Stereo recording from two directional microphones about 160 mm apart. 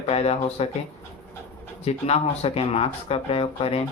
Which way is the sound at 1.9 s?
40° left (ahead or behind).